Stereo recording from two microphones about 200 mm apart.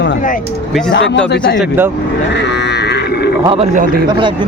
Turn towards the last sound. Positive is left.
turn(degrees=-25)  # may be behind; listen again after turning